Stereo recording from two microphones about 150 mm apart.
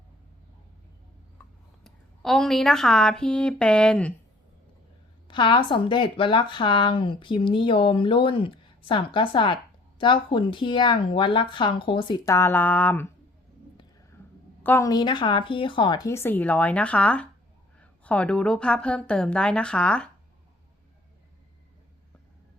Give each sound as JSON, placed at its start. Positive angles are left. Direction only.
{"t": 1.8, "sound": "a woman's voice", "side_deg": 0}
{"t": 5.3, "sound": "speech", "side_deg": 35}
{"t": 12.3, "sound": "a woman's voice", "side_deg": 15}
{"t": 14.6, "sound": "a woman's voice", "side_deg": 15}
{"t": 14.8, "sound": "a woman's voice", "side_deg": 30}